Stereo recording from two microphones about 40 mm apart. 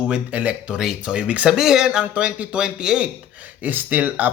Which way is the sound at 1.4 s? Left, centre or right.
Centre.